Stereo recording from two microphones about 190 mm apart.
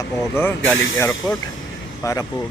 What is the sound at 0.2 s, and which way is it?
Speech, 10° left (ahead or behind).